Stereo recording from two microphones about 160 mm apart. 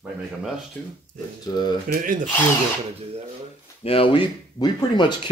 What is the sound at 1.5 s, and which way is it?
Speech, 25° left (ahead or behind).